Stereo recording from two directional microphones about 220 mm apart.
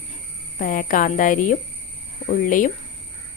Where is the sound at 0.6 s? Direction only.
40° left (ahead or behind).